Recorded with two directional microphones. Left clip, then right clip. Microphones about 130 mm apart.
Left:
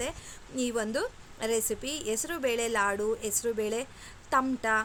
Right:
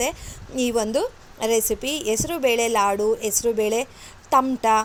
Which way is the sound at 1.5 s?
30° left (ahead or behind).